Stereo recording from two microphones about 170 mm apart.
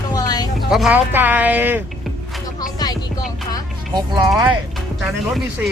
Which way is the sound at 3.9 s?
25° right (ahead or behind).